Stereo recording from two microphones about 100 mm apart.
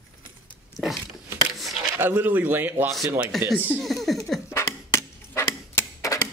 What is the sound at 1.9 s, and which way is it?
Speech, 20° right (ahead or behind).